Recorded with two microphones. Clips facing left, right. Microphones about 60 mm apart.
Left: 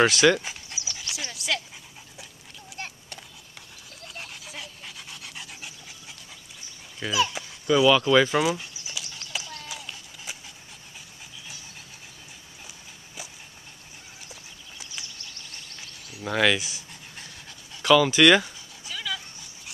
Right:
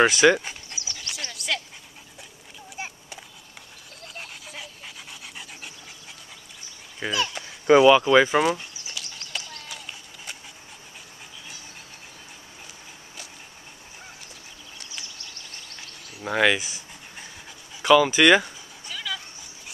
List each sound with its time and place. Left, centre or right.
0.0 s dog: centre
2.7 s a sound: centre
4.1 s dog: centre
7.1 s speech: centre
7.8 s speech: centre
8.4 s horse: centre
16.2 s speech: centre
16.6 s pant: centre
17.7 s dog: centre